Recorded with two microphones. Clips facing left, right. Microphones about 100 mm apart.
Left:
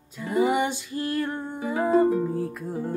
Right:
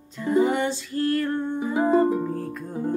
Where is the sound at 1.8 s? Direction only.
Centre (ahead or behind).